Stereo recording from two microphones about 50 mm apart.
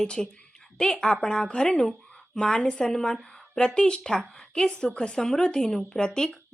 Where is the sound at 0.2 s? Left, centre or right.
Centre.